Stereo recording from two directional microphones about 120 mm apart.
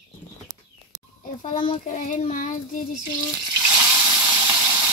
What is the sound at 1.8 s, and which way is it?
Speech, 90° left.